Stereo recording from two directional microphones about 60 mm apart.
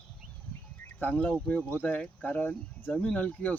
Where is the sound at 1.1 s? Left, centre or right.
Left.